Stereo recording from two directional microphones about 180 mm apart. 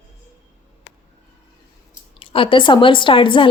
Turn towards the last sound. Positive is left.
turn(degrees=30)  # may be behind; listen again after turning